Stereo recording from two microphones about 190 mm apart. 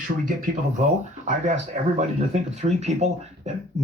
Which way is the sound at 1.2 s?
40° right (ahead or behind).